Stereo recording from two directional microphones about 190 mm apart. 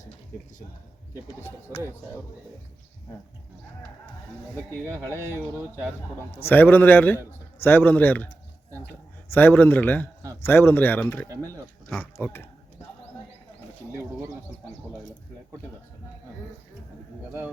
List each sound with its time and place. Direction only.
1.7 s speech: 15° right (ahead or behind)
4.9 s a man's voice: 10° left (ahead or behind)
9.3 s a man's voice: 10° left (ahead or behind)